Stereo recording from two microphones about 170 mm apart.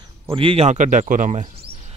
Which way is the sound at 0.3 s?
30° right (ahead or behind).